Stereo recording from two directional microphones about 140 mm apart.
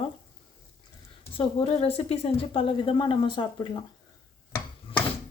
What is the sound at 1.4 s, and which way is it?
Speech, 45° left (ahead or behind).